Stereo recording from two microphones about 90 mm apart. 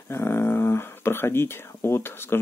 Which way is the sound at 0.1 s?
25° left (ahead or behind).